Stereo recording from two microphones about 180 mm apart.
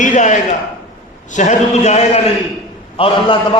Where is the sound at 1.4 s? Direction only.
40° left (ahead or behind).